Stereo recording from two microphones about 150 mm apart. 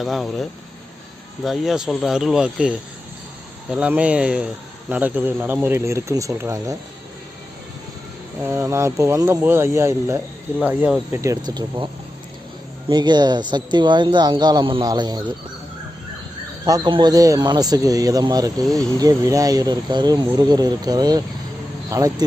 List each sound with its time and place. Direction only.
0.0 s speech: centre (ahead or behind)
1.5 s speech: centre (ahead or behind); by 6.7 s 20° right (ahead or behind)
8.4 s speech: 20° right (ahead or behind)
11.1 s speech: 20° right (ahead or behind)
12.9 s speech: 30° right (ahead or behind)
16.6 s speech: 25° right (ahead or behind)